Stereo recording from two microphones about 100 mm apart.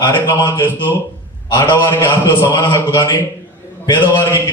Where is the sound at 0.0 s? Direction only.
50° left (ahead or behind).